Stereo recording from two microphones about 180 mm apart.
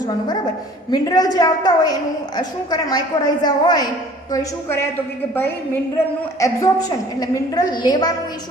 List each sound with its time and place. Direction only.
0.9 s a woman's voice: 20° left (ahead or behind)
6.4 s a woman's voice: 20° left (ahead or behind)